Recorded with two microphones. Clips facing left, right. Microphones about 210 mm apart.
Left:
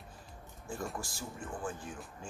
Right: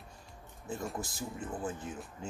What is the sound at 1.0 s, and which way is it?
Speech, 20° right (ahead or behind).